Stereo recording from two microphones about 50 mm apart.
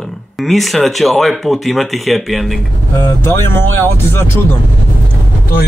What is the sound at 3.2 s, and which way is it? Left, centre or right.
Speech, left.